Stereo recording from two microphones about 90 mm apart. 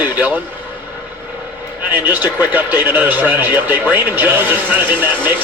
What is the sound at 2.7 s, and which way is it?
Speech, 20° right (ahead or behind).